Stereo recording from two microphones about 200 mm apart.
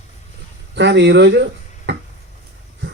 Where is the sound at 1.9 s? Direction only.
60° right (ahead or behind).